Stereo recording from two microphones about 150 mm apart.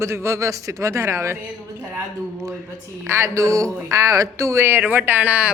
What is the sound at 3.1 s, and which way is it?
Speech, 20° right (ahead or behind).